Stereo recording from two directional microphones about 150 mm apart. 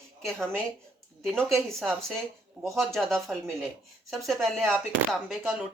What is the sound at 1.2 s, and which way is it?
Speech, 15° right (ahead or behind).